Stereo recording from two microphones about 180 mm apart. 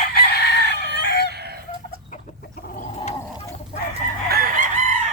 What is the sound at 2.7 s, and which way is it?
Gargling, 40° left (ahead or behind).